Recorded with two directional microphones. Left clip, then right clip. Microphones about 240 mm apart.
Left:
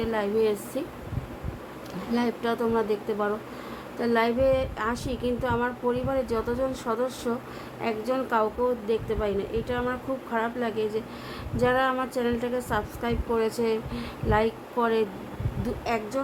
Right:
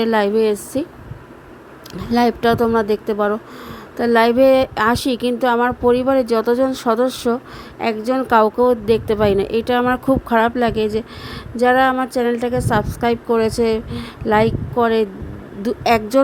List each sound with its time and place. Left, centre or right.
0.0 s a woman's voice: right
2.0 s a woman's voice: right